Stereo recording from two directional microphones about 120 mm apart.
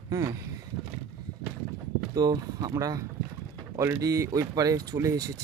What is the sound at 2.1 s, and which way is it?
Speech, 35° right (ahead or behind).